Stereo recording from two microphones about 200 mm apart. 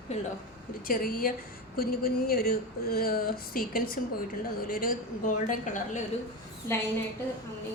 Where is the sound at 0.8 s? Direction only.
45° left (ahead or behind).